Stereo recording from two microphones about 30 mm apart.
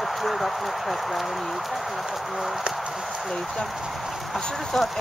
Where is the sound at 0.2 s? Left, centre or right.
Centre.